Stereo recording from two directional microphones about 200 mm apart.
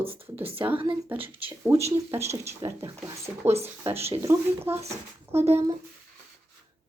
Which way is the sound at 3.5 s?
30° right (ahead or behind).